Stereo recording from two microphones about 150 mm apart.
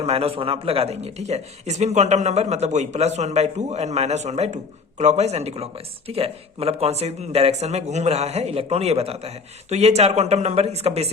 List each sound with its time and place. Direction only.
0.0 s speech: 40° right (ahead or behind)